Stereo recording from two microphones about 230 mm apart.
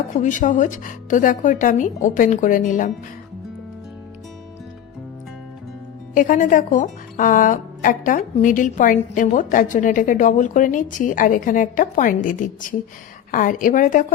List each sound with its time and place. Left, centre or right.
0.1 s a woman's voice: left
6.1 s a woman's voice: left